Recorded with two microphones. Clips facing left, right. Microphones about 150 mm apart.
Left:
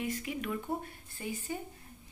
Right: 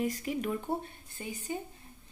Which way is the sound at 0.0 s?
40° right (ahead or behind).